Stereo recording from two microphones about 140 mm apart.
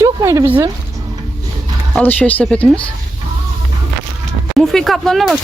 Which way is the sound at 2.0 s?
10° left (ahead or behind).